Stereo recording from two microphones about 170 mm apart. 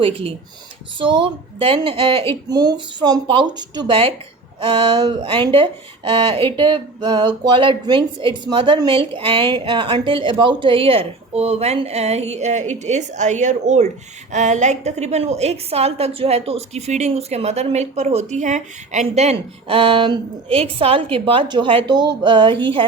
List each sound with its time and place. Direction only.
0.0 s a woman's voice: 35° right (ahead or behind)